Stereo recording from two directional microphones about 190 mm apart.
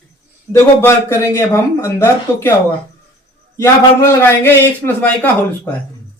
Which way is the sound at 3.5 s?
15° left (ahead or behind).